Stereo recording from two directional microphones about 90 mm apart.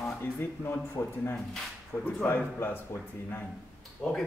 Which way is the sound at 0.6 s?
30° left (ahead or behind).